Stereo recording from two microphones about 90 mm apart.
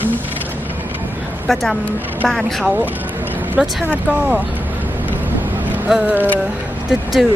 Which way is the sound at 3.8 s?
20° right (ahead or behind).